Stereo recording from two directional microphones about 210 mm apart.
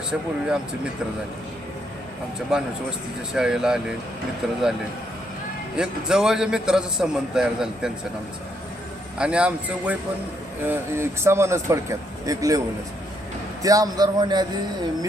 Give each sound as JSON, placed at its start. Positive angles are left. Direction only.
{"t": 0.1, "sound": "a man's voice", "side_deg": -5}
{"t": 2.5, "sound": "a man's voice", "side_deg": -5}
{"t": 5.7, "sound": "a man's voice", "side_deg": -5}
{"t": 9.1, "sound": "a man's voice", "side_deg": -5}